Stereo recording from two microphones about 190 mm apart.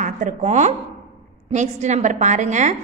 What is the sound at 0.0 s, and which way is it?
A woman's voice, 40° right (ahead or behind).